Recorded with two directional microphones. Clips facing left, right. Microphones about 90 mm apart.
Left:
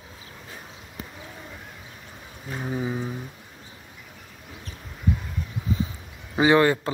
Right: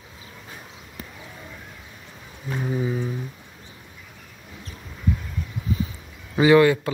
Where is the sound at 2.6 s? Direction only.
15° left (ahead or behind).